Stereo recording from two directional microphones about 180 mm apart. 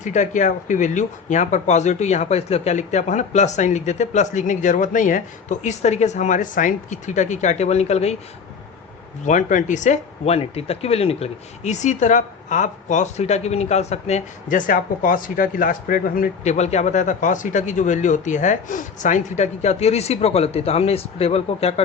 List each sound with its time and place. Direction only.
0.0 s speech: 40° left (ahead or behind)
9.2 s speech: 45° left (ahead or behind)